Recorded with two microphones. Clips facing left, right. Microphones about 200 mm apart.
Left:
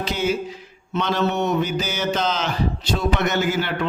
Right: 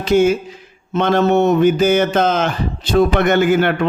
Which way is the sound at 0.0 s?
50° right (ahead or behind).